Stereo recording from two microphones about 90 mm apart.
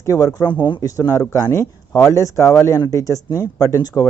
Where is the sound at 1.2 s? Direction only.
30° left (ahead or behind).